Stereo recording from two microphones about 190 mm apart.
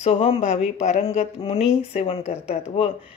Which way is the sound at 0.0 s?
35° left (ahead or behind).